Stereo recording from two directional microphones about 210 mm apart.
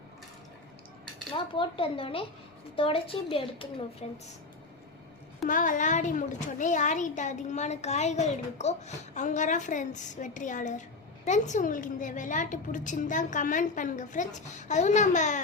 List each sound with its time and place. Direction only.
1.3 s a child's voice: 25° left (ahead or behind)
5.5 s a woman's voice: 40° left (ahead or behind)